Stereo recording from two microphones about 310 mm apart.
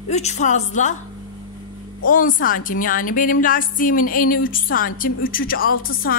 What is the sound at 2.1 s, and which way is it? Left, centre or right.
A woman's voice, left.